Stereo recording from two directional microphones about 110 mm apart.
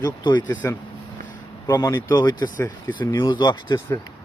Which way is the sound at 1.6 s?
35° left (ahead or behind).